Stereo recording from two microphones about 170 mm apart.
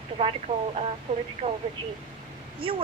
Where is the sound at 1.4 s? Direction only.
40° right (ahead or behind).